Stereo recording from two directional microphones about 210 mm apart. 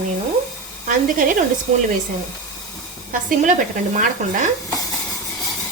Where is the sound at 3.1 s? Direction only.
40° right (ahead or behind).